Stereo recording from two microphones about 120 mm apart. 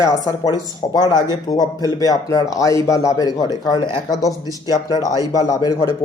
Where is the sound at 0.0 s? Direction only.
30° left (ahead or behind).